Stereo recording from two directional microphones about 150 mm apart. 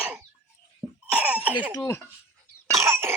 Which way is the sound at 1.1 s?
10° right (ahead or behind).